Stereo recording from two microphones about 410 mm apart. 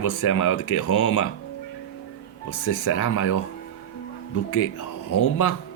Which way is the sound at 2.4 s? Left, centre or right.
Left.